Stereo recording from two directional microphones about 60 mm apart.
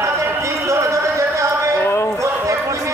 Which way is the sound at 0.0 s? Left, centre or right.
Right.